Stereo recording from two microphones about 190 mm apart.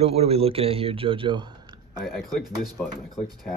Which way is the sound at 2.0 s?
Centre (ahead or behind).